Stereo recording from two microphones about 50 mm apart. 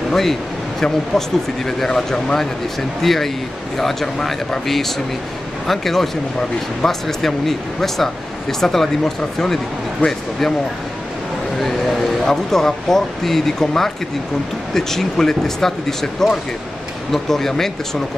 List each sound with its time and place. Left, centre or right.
0.1 s a sound: centre
0.8 s speech: centre
11.6 s speech: centre